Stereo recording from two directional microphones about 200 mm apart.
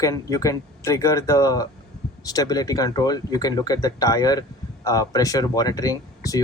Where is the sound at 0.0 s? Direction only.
15° left (ahead or behind).